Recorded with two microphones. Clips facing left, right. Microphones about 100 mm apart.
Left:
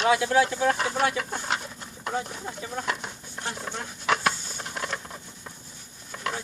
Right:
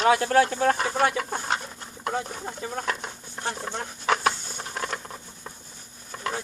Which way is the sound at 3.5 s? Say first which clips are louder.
Right 3 dB; 40° right (ahead or behind).